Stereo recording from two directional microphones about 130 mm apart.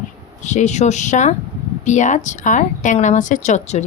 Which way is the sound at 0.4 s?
65° left (ahead or behind).